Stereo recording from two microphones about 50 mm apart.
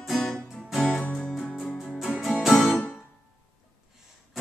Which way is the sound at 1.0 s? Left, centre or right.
Left.